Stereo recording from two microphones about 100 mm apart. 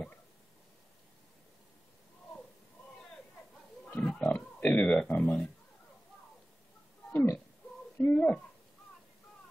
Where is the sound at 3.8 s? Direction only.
10° left (ahead or behind).